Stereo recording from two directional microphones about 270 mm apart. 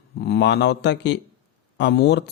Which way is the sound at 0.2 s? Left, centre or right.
Left.